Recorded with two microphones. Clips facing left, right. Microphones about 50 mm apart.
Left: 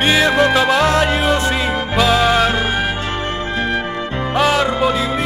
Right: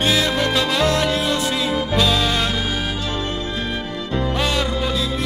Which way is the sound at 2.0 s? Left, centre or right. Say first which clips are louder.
Left 6 dB; centre.